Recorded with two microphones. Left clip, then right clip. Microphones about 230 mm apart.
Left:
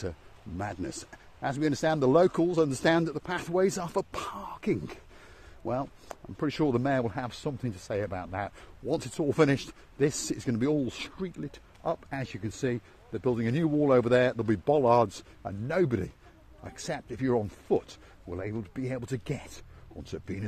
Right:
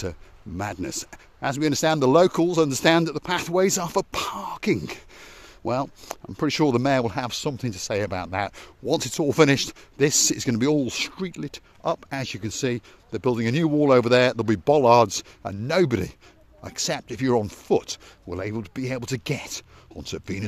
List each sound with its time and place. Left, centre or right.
0.6 s speech: right